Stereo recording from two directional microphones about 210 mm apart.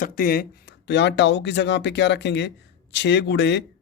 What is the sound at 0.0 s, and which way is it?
A man's voice, 45° left (ahead or behind).